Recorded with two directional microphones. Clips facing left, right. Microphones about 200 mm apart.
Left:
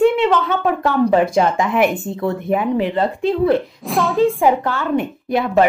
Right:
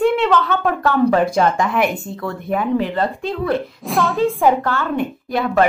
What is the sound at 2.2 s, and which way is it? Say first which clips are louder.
Speech: left 3 dB; 20° left (ahead or behind).